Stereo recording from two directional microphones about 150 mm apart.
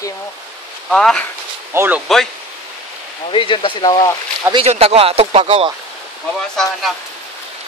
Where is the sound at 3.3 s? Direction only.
35° left (ahead or behind).